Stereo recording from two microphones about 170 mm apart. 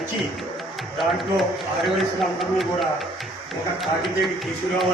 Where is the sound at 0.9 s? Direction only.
Centre (ahead or behind).